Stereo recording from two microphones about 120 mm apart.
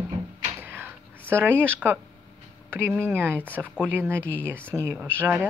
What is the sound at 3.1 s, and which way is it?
Speech, 20° right (ahead or behind).